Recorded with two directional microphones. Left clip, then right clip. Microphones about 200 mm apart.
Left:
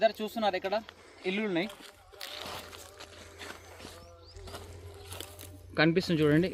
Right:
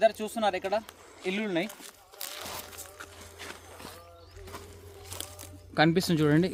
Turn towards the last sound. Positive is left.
turn(degrees=-70)  # may be behind; listen again after turning